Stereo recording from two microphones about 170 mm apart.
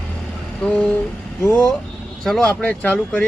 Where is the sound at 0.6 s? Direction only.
5° left (ahead or behind).